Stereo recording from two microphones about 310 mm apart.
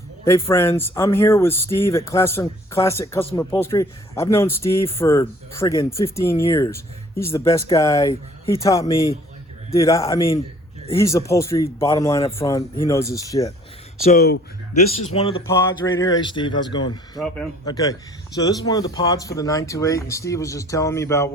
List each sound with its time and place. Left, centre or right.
0.3 s speech: centre
14.0 s speech: left
17.2 s speech: centre